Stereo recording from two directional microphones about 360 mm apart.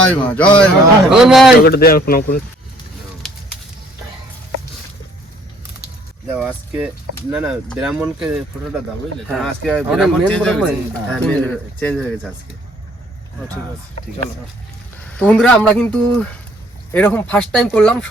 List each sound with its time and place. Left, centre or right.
0.0 s speech: centre
1.6 s speech: left
6.3 s speech: centre
15.2 s speech: centre